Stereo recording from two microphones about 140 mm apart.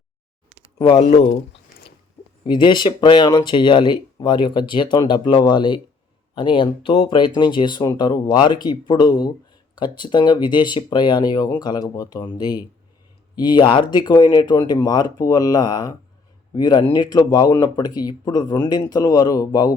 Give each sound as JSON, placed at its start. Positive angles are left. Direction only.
{"t": 0.8, "sound": "speech", "side_deg": 35}
{"t": 1.0, "sound": "speech", "side_deg": 50}
{"t": 2.4, "sound": "speech", "side_deg": 35}